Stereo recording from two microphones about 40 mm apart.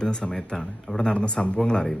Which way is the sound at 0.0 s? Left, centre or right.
Centre.